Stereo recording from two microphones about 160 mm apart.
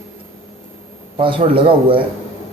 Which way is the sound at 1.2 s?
30° right (ahead or behind).